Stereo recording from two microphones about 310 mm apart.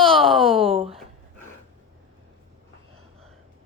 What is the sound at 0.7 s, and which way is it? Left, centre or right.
Speech, centre.